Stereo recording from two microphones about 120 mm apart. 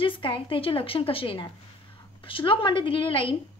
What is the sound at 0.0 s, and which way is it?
A woman's voice, 45° left (ahead or behind).